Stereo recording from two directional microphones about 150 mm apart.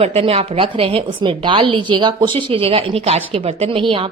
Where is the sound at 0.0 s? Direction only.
40° right (ahead or behind).